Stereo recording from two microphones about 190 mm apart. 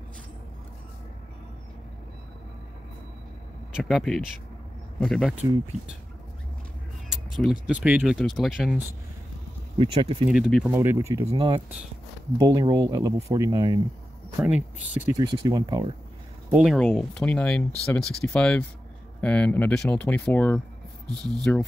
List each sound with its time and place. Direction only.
3.7 s speech: centre (ahead or behind)
5.3 s speech: 10° right (ahead or behind)
7.6 s speech: 5° right (ahead or behind)
9.8 s speech: 30° right (ahead or behind)
10.3 s speech: centre (ahead or behind)
10.7 s speech: 15° right (ahead or behind)
11.2 s speech: 25° right (ahead or behind)
15.1 s speech: 20° right (ahead or behind)
16.4 s speech: 5° right (ahead or behind)